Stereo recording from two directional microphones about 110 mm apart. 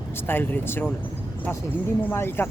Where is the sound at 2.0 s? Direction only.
20° left (ahead or behind).